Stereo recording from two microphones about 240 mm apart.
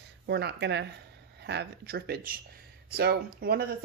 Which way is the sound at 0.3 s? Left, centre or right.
Right.